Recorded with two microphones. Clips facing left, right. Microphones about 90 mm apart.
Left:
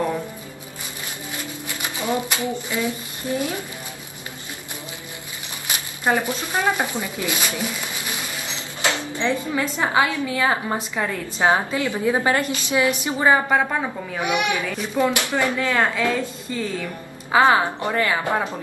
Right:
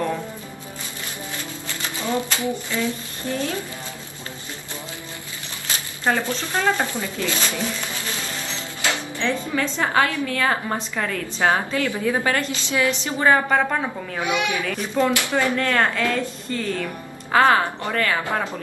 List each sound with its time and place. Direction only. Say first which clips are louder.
1.7 s speech: left 1 dB; 15° left (ahead or behind)
5.7 s shuffling cards: left 1 dB; 15° left (ahead or behind)
9.0 s a woman's voice: left 1 dB; 20° left (ahead or behind)
14.2 s a child's voice: left 1 dB; 20° left (ahead or behind)